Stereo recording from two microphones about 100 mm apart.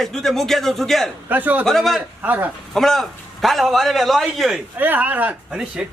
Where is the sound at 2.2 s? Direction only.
20° right (ahead or behind).